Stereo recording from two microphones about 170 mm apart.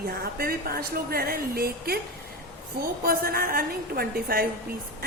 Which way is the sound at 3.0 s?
60° right (ahead or behind).